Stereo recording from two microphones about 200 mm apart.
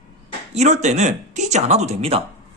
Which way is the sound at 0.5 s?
35° right (ahead or behind).